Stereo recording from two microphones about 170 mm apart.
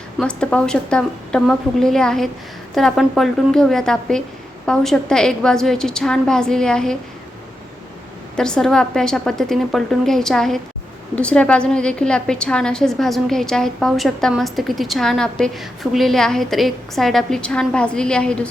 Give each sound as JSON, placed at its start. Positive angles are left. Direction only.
{"t": 0.2, "sound": "a woman's voice", "side_deg": 5}
{"t": 8.4, "sound": "a woman's voice", "side_deg": 5}